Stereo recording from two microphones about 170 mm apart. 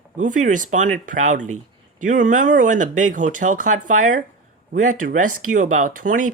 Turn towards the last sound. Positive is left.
turn(degrees=-50)  # may be behind; listen again after turning